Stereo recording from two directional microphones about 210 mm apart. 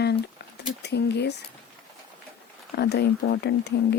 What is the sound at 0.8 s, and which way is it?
Speech, 55° left (ahead or behind).